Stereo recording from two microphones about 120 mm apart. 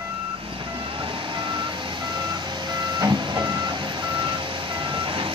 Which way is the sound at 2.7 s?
35° right (ahead or behind).